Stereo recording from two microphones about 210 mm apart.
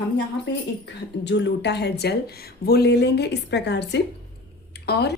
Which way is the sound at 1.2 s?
55° left (ahead or behind).